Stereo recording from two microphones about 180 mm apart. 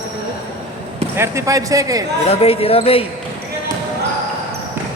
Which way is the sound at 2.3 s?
30° left (ahead or behind).